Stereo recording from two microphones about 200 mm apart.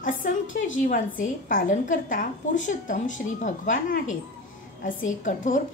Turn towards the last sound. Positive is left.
turn(degrees=40)  # may be behind; listen again after turning